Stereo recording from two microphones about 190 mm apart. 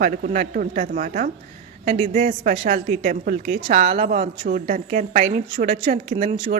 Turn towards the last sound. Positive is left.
turn(degrees=-45)  # may be behind; listen again after turning